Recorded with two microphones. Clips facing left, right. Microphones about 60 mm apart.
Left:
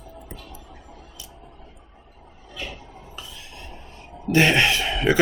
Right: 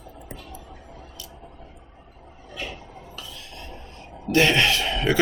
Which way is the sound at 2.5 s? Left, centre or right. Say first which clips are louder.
Right 1 dB; right.